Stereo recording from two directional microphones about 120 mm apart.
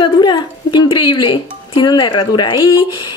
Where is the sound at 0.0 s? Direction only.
40° left (ahead or behind).